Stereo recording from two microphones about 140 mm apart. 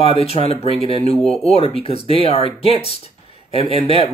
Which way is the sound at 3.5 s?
40° left (ahead or behind).